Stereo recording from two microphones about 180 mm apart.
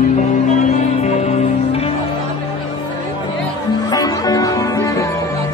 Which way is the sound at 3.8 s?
20° left (ahead or behind).